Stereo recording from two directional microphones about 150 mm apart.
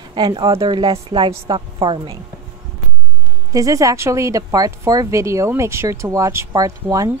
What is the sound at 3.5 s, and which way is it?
A woman's voice, 20° right (ahead or behind).